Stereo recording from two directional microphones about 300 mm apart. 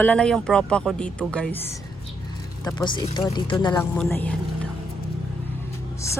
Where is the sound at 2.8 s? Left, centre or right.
Centre.